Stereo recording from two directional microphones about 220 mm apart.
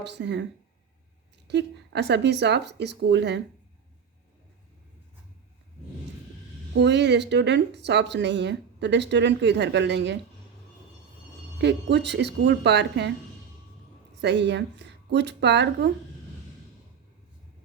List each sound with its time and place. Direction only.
0.0 s speech: 50° right (ahead or behind)
1.5 s speech: 50° right (ahead or behind)
6.7 s speech: 50° right (ahead or behind)
11.6 s speech: 50° right (ahead or behind)
14.2 s a woman's voice: 55° right (ahead or behind)